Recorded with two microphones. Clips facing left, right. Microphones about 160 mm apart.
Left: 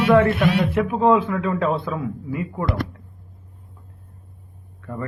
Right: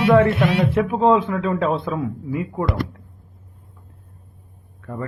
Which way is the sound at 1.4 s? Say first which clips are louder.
Right 1 dB; 20° right (ahead or behind).